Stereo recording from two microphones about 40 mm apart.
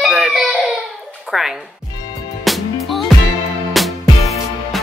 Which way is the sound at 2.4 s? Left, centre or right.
Centre.